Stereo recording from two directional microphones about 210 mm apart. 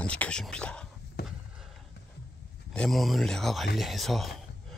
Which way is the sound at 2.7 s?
Centre (ahead or behind).